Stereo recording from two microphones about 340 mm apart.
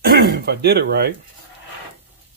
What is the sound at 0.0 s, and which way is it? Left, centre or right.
Speech, right.